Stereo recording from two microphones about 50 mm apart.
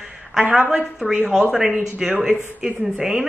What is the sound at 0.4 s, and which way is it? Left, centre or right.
Speech, right.